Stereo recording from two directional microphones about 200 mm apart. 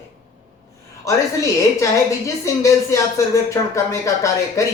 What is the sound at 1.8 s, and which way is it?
Speech, 15° left (ahead or behind).